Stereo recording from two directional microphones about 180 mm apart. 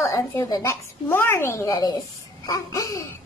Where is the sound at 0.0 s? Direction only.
15° left (ahead or behind).